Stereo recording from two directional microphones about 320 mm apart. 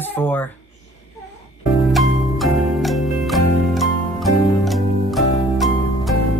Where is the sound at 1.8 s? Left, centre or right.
Centre.